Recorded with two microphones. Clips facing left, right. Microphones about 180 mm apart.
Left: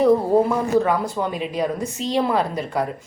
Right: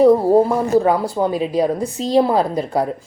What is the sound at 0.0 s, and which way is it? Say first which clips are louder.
A woman's voice: right 4 dB; 30° right (ahead or behind).